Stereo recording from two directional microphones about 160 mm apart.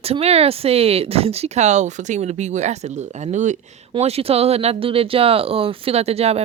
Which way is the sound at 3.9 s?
40° right (ahead or behind).